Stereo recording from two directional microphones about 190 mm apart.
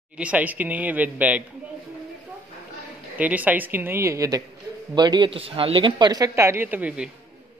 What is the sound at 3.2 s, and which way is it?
Speech, 10° right (ahead or behind).